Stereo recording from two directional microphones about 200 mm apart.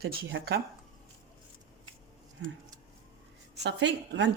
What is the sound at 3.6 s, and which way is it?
Speech, 60° right (ahead or behind).